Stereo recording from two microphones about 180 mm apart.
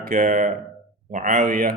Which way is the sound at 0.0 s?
45° right (ahead or behind).